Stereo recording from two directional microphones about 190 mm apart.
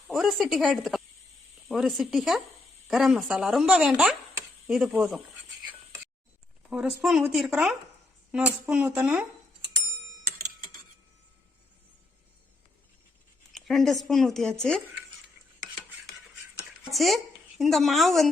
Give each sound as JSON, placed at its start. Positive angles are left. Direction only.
{"t": 0.1, "sound": "a woman's voice", "side_deg": 0}
{"t": 6.6, "sound": "a woman's voice", "side_deg": -5}
{"t": 13.5, "sound": "a woman's voice", "side_deg": 0}
{"t": 16.9, "sound": "a woman's voice", "side_deg": 0}